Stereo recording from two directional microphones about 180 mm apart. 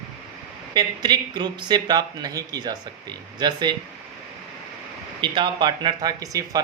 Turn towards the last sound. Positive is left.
turn(degrees=-20)  # may be behind; listen again after turning